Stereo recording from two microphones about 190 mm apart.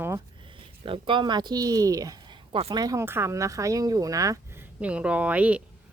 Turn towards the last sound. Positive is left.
turn(degrees=-5)  # may be behind; listen again after turning